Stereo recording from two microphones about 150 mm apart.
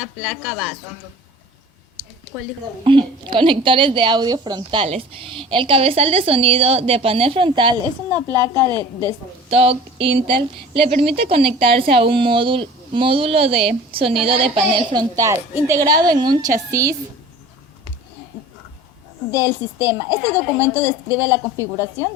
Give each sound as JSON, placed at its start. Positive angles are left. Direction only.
{"t": 0.0, "sound": "a woman's voice", "side_deg": -5}
{"t": 2.8, "sound": "a woman's voice", "side_deg": -35}
{"t": 9.5, "sound": "a woman's voice", "side_deg": -40}
{"t": 15.1, "sound": "a woman's voice", "side_deg": -20}
{"t": 19.3, "sound": "a woman's voice", "side_deg": -20}